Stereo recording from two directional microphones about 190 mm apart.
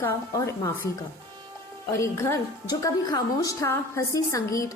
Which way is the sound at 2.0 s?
15° left (ahead or behind).